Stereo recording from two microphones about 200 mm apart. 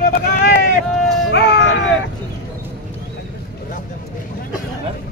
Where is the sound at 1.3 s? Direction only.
55° left (ahead or behind).